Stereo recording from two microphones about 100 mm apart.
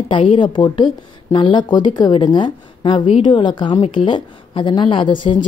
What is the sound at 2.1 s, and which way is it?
A woman's voice, 55° left (ahead or behind).